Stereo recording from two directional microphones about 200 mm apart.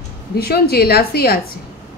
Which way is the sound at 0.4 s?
50° left (ahead or behind).